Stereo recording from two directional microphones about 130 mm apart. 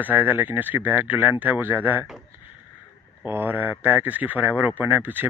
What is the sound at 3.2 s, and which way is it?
Speech, 15° right (ahead or behind).